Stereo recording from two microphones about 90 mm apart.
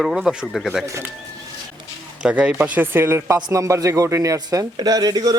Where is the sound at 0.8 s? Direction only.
35° right (ahead or behind).